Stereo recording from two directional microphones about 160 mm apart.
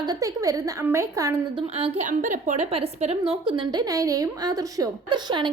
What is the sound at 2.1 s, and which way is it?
Speech, 55° right (ahead or behind).